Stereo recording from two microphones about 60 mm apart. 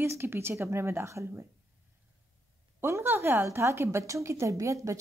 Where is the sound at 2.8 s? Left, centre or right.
Right.